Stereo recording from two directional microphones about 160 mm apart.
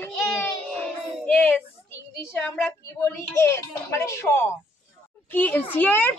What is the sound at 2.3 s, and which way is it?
A woman's voice, 15° left (ahead or behind).